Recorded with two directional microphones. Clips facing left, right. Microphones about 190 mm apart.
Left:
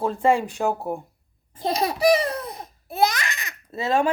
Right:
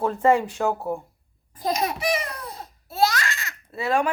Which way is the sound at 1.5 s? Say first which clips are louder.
Left 1 dB; 30° left (ahead or behind).